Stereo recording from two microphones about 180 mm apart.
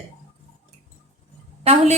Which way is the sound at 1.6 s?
35° right (ahead or behind).